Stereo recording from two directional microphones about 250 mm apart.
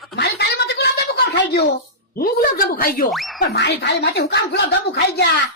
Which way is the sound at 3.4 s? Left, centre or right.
Left.